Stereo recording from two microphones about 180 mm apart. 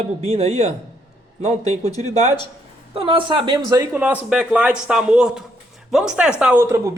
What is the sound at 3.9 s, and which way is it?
Speech, 5° right (ahead or behind).